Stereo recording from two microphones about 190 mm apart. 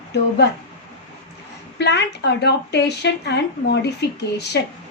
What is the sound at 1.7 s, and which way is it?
Speech, 65° left (ahead or behind).